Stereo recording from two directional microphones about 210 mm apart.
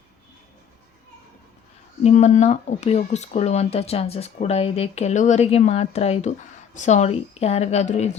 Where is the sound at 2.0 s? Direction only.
35° left (ahead or behind).